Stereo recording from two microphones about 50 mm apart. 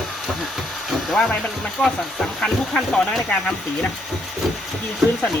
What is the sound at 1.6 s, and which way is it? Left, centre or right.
Speech, centre.